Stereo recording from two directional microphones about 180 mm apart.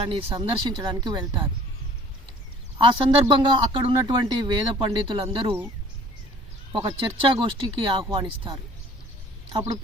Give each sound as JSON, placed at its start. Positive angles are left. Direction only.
{"t": 0.0, "sound": "speech", "side_deg": -30}
{"t": 2.7, "sound": "speech", "side_deg": -30}
{"t": 6.7, "sound": "a woman's voice", "side_deg": -25}